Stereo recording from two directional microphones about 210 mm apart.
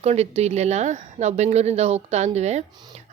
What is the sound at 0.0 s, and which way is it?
A woman's voice, 30° right (ahead or behind).